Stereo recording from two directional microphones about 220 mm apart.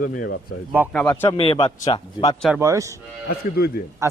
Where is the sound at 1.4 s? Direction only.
25° left (ahead or behind).